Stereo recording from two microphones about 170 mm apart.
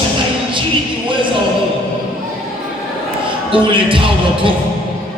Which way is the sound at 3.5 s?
30° right (ahead or behind).